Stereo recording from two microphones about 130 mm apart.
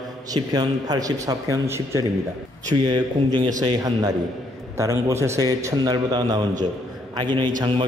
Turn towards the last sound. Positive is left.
turn(degrees=-35)  # may be behind; listen again after turning